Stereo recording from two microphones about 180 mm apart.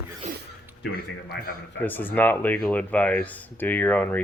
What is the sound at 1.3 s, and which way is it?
Speech, 65° left (ahead or behind).